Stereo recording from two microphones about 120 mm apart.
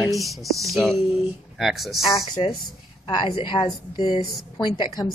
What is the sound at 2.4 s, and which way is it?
A woman's voice, 45° left (ahead or behind).